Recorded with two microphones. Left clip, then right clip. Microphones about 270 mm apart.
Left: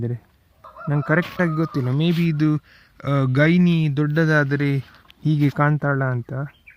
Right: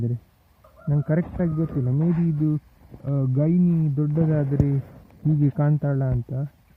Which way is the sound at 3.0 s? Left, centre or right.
Left.